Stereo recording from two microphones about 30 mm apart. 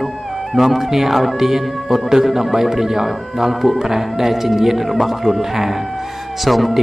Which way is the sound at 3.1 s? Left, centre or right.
Centre.